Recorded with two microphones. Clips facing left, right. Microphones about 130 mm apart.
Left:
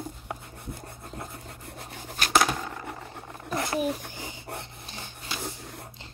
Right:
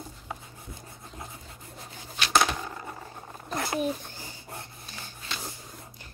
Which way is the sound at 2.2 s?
45° left (ahead or behind).